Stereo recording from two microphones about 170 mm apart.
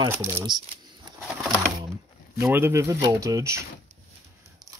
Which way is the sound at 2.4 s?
15° right (ahead or behind).